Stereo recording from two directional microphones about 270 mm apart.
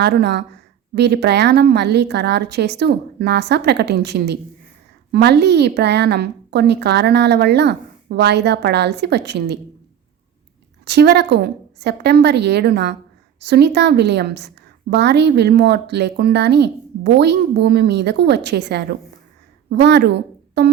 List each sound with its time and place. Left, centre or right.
0.0 s a woman's voice: right
10.8 s a woman's voice: right